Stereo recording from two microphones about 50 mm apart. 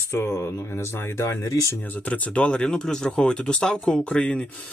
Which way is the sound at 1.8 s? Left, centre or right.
Left.